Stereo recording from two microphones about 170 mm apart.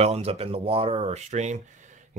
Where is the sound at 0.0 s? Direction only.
35° right (ahead or behind).